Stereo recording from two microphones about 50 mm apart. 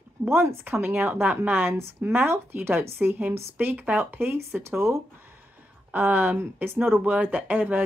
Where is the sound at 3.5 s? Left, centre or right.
Right.